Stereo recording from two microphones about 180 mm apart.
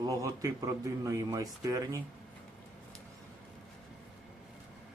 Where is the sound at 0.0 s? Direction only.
20° right (ahead or behind).